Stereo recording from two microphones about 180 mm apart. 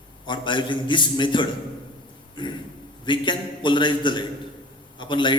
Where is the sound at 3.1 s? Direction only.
25° left (ahead or behind).